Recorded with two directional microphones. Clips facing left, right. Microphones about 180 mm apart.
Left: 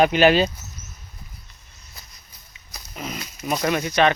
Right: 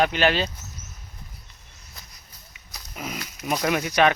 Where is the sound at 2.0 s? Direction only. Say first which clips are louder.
Even; 5° left (ahead or behind).